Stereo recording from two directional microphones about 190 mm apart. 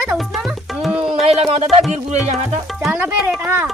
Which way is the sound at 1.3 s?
30° right (ahead or behind).